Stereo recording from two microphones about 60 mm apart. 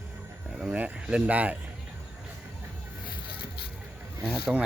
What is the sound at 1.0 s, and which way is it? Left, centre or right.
Speech, right.